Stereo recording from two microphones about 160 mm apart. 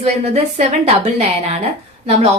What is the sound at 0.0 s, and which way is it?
A woman's voice, 40° right (ahead or behind).